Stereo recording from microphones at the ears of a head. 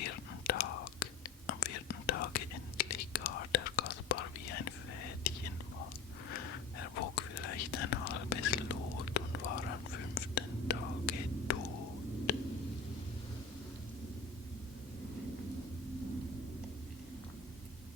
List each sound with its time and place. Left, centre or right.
0.0 s whispering: left